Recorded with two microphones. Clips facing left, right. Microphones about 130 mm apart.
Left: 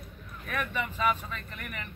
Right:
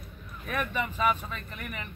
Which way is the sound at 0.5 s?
20° right (ahead or behind).